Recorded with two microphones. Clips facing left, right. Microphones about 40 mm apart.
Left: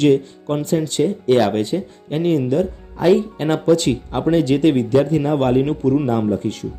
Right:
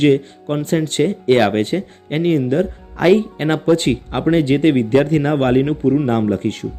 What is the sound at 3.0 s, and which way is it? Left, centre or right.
Speech, right.